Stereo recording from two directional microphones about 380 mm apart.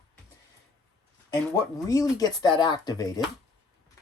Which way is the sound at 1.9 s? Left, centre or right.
Centre.